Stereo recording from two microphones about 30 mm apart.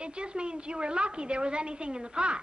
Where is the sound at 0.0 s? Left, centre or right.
Right.